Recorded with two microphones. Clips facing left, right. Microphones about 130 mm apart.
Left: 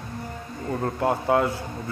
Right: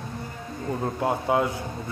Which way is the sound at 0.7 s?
15° right (ahead or behind).